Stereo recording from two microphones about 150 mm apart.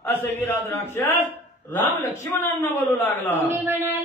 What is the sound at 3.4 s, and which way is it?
Speech, 15° right (ahead or behind).